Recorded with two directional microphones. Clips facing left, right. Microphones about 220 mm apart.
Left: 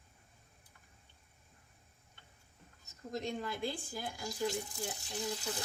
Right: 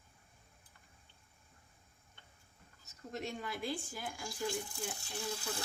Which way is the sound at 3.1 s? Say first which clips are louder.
Left 3 dB; 35° left (ahead or behind).